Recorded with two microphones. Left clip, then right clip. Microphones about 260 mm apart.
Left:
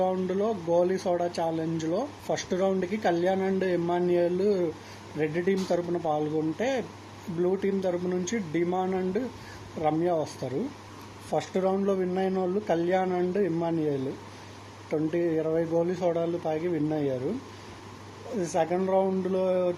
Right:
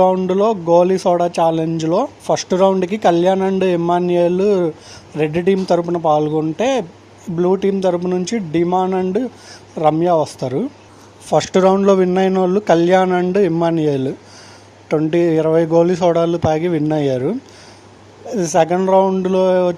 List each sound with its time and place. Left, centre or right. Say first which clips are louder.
0.0 s speech: right 13 dB; right
18.3 s speech: right 12 dB; right